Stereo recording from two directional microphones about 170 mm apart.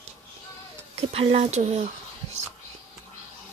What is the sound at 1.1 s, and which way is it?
Speech, 35° right (ahead or behind).